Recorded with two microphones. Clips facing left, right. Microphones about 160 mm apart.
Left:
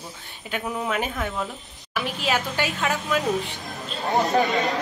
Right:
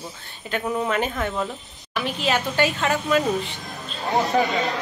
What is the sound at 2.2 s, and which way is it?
Speech, 5° left (ahead or behind).